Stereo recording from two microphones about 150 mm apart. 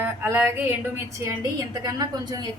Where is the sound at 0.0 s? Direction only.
15° right (ahead or behind).